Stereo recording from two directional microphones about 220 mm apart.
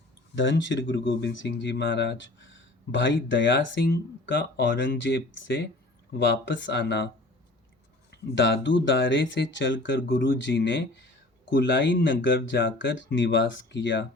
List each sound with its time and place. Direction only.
0.3 s speech: 55° left (ahead or behind)
8.1 s speech: 55° left (ahead or behind)